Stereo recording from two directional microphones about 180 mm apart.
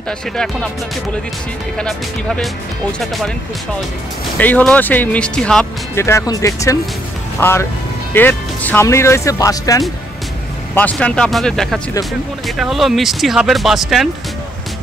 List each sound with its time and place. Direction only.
1.8 s speech: 5° left (ahead or behind)
4.4 s speech: 10° left (ahead or behind)
5.9 s speech: 15° left (ahead or behind); by 14.0 s centre (ahead or behind)